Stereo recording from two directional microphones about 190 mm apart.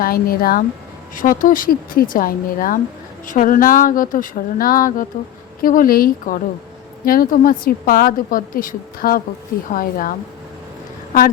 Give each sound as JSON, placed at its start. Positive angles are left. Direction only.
{"t": 0.0, "sound": "a woman's voice", "side_deg": 50}